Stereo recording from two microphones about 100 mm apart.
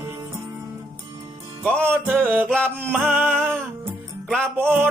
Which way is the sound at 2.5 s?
10° left (ahead or behind).